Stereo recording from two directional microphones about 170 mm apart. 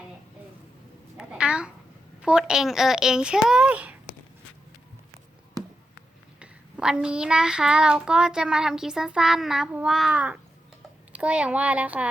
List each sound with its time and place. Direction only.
1.1 s a sound: 5° right (ahead or behind)
2.2 s child singing: 5° right (ahead or behind)
6.4 s child singing: 5° right (ahead or behind)
11.1 s speech: 5° right (ahead or behind)